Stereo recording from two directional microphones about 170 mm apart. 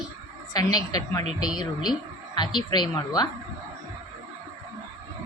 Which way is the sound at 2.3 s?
25° left (ahead or behind).